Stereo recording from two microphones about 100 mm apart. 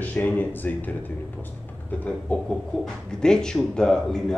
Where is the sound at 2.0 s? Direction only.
10° left (ahead or behind).